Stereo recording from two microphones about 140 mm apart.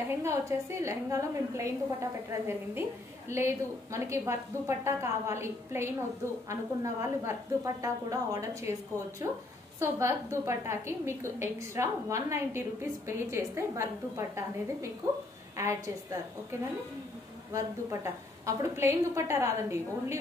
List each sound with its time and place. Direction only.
0.2 s a woman's voice: 20° right (ahead or behind)
17.5 s a woman's voice: 20° right (ahead or behind)